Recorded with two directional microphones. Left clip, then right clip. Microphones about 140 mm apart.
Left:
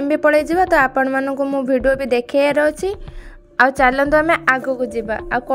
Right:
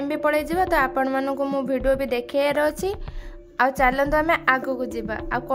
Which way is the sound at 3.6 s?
30° left (ahead or behind).